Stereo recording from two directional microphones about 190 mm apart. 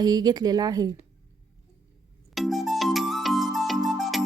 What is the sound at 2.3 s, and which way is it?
Music, centre (ahead or behind).